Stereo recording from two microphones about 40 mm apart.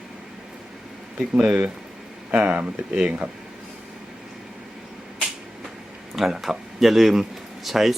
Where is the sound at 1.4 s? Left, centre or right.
Right.